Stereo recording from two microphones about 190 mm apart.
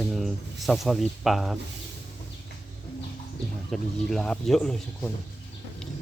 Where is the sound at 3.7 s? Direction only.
5° left (ahead or behind).